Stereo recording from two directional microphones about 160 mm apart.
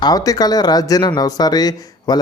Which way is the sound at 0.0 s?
25° left (ahead or behind).